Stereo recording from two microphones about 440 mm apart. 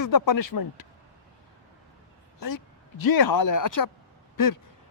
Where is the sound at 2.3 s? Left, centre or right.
Left.